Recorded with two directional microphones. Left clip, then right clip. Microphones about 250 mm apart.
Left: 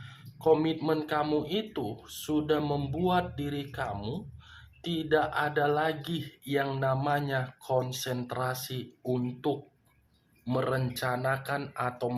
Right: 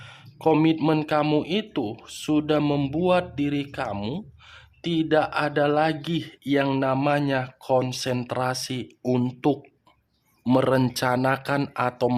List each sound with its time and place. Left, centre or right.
0.0 s speech: right